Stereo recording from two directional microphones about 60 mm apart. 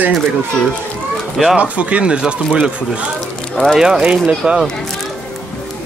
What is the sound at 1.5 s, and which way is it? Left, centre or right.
Speech, right.